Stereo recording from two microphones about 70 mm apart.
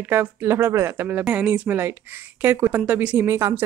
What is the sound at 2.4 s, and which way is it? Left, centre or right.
Speech, right.